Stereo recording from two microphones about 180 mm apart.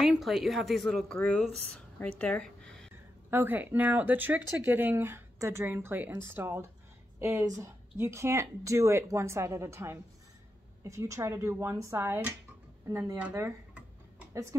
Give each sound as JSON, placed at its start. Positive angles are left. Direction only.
{"t": 0.0, "sound": "speech", "side_deg": 0}
{"t": 3.3, "sound": "speech", "side_deg": -10}